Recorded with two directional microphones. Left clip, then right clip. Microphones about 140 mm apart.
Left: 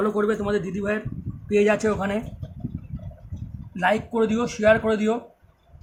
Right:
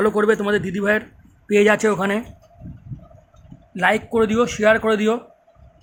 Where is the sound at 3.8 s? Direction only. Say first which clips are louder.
Right 4 dB; 40° right (ahead or behind).